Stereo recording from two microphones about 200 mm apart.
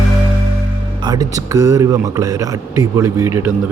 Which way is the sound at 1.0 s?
20° right (ahead or behind).